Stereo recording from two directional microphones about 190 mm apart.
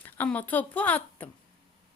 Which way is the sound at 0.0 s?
10° left (ahead or behind).